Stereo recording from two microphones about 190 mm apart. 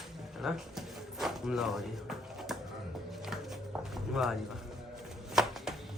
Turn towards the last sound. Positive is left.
turn(degrees=0)  # may be behind; listen again after turning